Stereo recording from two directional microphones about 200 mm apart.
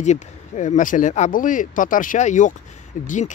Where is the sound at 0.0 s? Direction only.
35° left (ahead or behind).